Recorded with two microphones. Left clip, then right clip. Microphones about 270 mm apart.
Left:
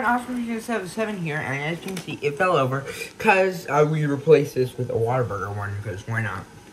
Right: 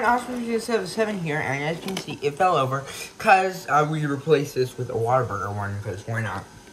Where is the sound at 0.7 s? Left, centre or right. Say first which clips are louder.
Right 2 dB; centre.